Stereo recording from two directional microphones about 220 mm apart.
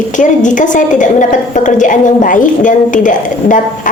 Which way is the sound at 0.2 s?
35° left (ahead or behind).